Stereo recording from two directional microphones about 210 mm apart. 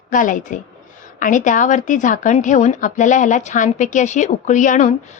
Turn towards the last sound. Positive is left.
turn(degrees=35)  # may be behind; listen again after turning